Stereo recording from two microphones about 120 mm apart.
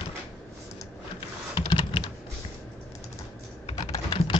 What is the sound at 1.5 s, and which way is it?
Computer keyboard, 40° left (ahead or behind).